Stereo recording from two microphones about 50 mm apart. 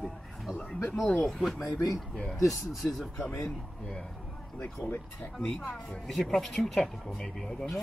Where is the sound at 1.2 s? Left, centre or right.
Centre.